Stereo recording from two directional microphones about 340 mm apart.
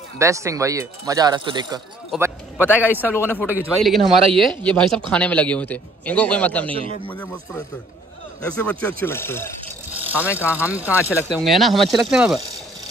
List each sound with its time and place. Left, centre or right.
0.2 s a man's voice: centre
3.1 s speech: centre
10.1 s speech: centre